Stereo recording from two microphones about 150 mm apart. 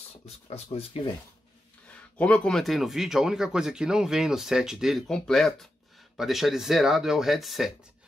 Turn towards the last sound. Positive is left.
turn(degrees=0)  # may be behind; listen again after turning